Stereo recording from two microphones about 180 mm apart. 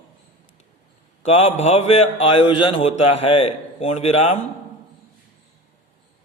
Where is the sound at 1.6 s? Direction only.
35° left (ahead or behind).